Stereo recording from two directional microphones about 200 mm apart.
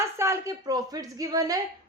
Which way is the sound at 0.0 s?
15° right (ahead or behind).